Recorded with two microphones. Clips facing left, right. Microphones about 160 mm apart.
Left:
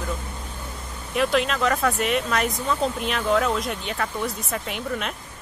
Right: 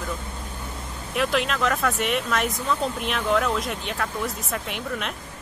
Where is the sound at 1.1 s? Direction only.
Centre (ahead or behind).